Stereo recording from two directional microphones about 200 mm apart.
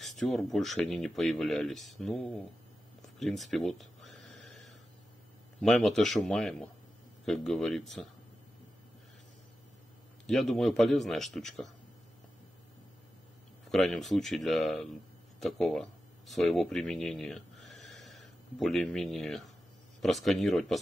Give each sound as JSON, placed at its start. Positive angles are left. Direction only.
{"t": 0.0, "sound": "speech", "side_deg": 0}
{"t": 3.2, "sound": "a sound", "side_deg": 0}
{"t": 5.6, "sound": "speech", "side_deg": 0}
{"t": 10.2, "sound": "speech", "side_deg": 0}
{"t": 13.7, "sound": "speech", "side_deg": 0}